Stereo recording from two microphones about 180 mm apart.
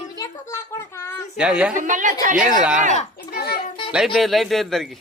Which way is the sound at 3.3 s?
60° left (ahead or behind).